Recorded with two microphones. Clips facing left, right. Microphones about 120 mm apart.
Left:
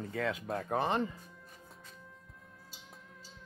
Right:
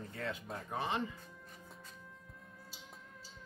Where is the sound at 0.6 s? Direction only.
45° left (ahead or behind).